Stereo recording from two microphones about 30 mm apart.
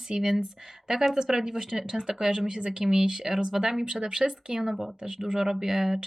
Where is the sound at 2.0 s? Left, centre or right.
Right.